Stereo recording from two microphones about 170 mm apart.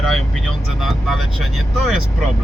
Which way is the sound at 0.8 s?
Centre (ahead or behind).